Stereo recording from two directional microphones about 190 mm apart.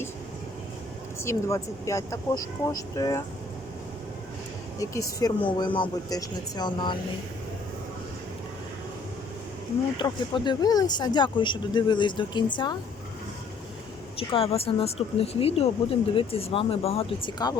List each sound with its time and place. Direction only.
1.2 s speech: 15° left (ahead or behind)
4.8 s speech: 15° left (ahead or behind)
10.0 s speech: 25° left (ahead or behind)
14.2 s speech: 30° left (ahead or behind)